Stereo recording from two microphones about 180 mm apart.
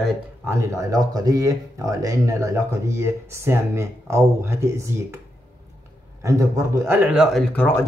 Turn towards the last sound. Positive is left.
turn(degrees=10)  # may be behind; listen again after turning